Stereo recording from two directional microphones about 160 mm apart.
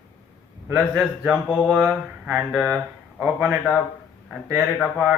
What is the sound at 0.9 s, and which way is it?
Speech, 5° right (ahead or behind).